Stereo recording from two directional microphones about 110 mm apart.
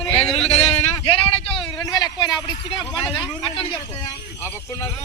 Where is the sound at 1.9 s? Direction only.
40° left (ahead or behind).